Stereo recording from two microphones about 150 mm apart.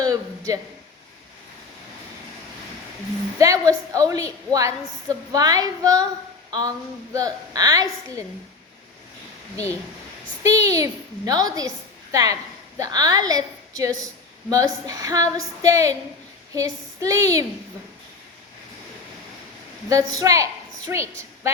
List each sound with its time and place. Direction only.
0.0 s a sound: 25° right (ahead or behind)
3.3 s a woman's voice: 20° right (ahead or behind)
10.4 s a woman's voice: 20° right (ahead or behind)
19.9 s a woman's voice: 25° right (ahead or behind)